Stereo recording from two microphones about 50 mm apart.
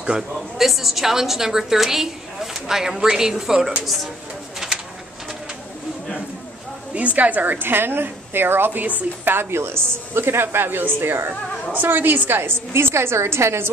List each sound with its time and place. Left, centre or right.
0.6 s a woman's voice: centre
4.6 s bird: centre
7.2 s speech: right